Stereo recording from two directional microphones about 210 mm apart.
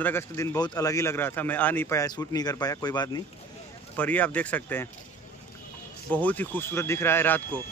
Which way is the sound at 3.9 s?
5° left (ahead or behind).